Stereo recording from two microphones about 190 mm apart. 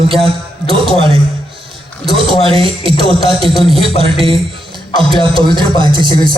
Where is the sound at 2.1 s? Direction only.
30° right (ahead or behind).